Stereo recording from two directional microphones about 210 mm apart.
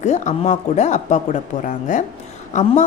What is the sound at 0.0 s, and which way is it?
A woman's voice, 35° left (ahead or behind).